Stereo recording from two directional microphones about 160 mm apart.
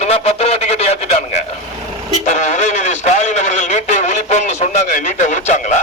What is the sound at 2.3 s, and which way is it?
Radio, 45° left (ahead or behind).